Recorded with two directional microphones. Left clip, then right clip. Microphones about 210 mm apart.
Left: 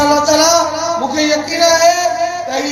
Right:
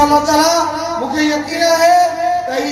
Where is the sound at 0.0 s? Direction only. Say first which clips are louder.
Even; 30° left (ahead or behind).